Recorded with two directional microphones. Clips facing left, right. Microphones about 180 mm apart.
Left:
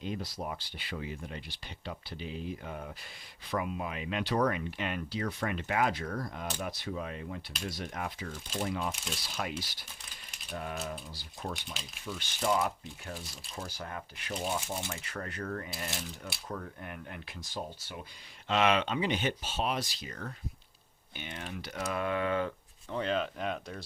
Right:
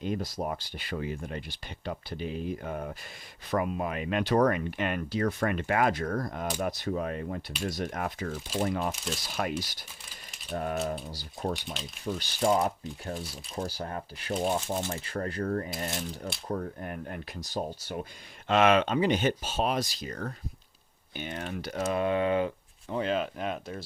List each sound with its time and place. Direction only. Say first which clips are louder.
0.0 s speech: right 5 dB; 45° right (ahead or behind)
21.9 s speech: right 5 dB; 25° right (ahead or behind)
23.0 s speech: right 3 dB; 5° right (ahead or behind)